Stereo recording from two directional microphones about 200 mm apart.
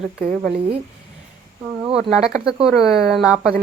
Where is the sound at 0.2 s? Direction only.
45° right (ahead or behind).